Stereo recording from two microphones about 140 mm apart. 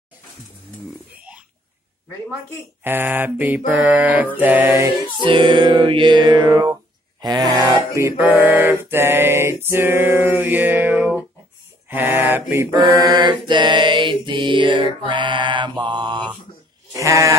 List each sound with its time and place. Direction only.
2.8 s mantra: 15° right (ahead or behind)
5.2 s music: 35° right (ahead or behind)
8.2 s mantra: 10° right (ahead or behind)
12.7 s mantra: 25° right (ahead or behind)
16.9 s sheep: 20° right (ahead or behind)